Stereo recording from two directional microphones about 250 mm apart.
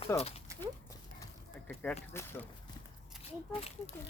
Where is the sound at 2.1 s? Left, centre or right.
Centre.